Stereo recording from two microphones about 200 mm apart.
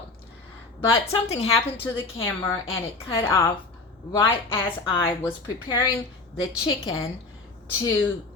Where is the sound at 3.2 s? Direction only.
15° left (ahead or behind).